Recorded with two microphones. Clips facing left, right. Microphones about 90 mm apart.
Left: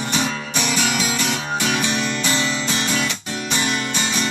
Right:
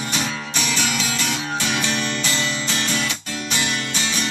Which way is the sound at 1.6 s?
15° left (ahead or behind).